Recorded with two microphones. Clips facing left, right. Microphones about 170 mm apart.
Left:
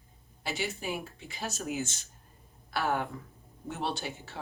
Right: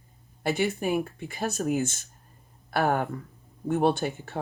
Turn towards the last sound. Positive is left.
turn(degrees=-55)  # may be behind; listen again after turning